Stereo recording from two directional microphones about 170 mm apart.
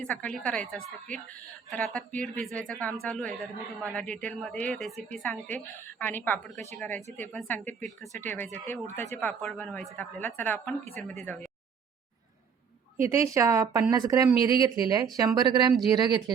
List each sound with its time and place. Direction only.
0.0 s a woman's voice: 5° left (ahead or behind)
13.0 s speech: 15° right (ahead or behind)